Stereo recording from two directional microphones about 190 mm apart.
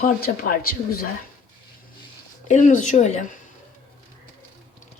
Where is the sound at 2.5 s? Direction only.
40° left (ahead or behind).